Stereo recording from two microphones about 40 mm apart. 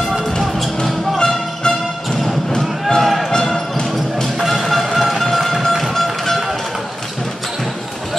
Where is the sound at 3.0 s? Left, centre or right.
Centre.